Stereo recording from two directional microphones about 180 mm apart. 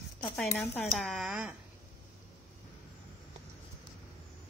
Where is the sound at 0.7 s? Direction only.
10° left (ahead or behind).